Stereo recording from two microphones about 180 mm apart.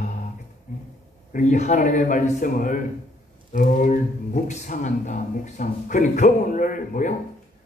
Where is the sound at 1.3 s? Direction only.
45° left (ahead or behind).